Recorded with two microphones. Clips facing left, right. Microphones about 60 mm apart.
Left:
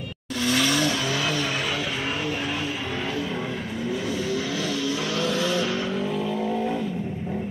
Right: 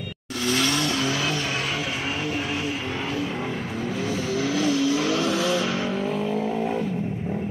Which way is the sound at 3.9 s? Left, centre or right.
Right.